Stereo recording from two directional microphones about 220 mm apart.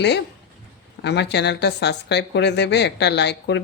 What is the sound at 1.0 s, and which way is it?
Speech, 50° left (ahead or behind).